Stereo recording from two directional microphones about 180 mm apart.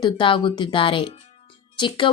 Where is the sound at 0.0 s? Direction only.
25° left (ahead or behind).